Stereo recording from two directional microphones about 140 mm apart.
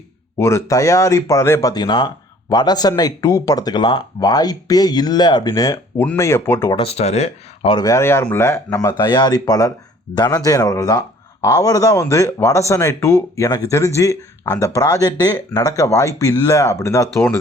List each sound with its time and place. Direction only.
0.3 s speech: 20° left (ahead or behind)
1.7 s speech: 30° left (ahead or behind)
6.7 s speech: 45° left (ahead or behind)
7.8 s speech: 20° left (ahead or behind)
9.0 s speech: 30° left (ahead or behind)